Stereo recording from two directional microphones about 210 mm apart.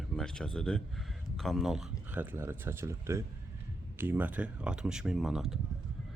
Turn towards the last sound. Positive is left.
turn(degrees=0)  # may be behind; listen again after turning